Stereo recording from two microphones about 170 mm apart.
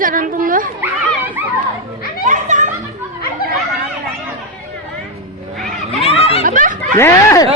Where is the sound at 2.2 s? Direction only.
45° right (ahead or behind).